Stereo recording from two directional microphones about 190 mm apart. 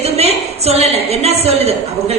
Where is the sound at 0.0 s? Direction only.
35° right (ahead or behind).